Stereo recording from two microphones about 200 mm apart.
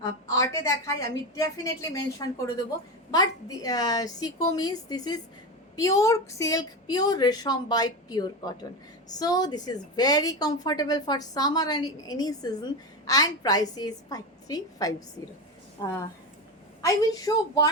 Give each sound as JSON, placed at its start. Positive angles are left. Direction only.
{"t": 0.0, "sound": "a woman's voice", "side_deg": 15}
{"t": 16.8, "sound": "a woman's voice", "side_deg": 20}